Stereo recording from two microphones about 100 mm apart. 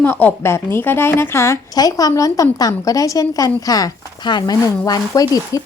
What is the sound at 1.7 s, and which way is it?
Speech, 40° left (ahead or behind).